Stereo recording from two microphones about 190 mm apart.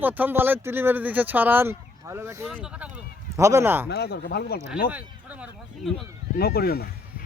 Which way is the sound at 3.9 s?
60° left (ahead or behind).